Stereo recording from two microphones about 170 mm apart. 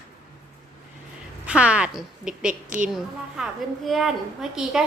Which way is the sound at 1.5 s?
5° right (ahead or behind).